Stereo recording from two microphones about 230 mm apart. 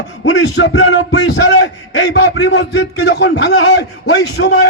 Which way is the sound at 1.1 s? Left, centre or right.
Left.